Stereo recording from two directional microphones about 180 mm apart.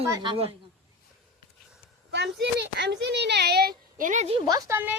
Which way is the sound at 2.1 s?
70° right (ahead or behind).